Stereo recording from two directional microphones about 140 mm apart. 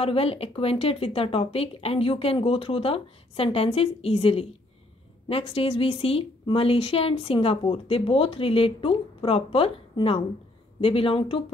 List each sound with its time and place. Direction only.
0.0 s a woman's voice: 45° left (ahead or behind)